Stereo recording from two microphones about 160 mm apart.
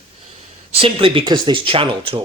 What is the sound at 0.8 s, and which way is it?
Speech, 35° right (ahead or behind).